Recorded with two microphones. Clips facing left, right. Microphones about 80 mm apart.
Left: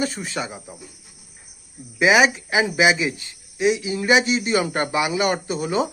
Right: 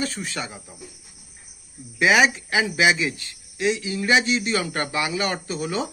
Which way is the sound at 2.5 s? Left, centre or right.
Centre.